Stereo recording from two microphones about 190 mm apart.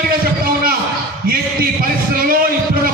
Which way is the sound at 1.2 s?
50° right (ahead or behind).